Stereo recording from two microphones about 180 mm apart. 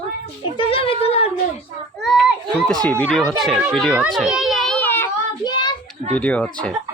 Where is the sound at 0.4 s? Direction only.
30° left (ahead or behind).